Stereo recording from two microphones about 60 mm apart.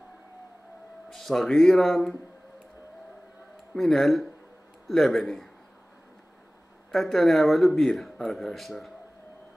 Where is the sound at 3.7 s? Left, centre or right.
Centre.